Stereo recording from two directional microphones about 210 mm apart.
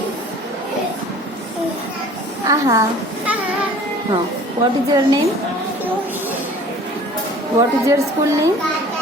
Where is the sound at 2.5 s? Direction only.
15° right (ahead or behind).